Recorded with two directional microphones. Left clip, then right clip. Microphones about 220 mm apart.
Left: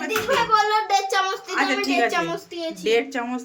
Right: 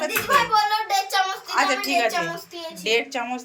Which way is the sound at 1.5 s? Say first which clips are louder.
Right 1 dB; 10° left (ahead or behind).